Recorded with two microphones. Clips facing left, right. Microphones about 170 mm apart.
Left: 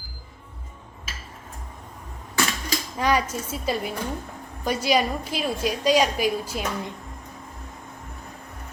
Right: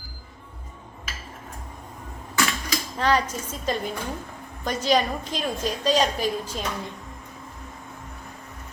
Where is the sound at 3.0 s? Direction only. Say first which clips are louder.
Even; 10° left (ahead or behind).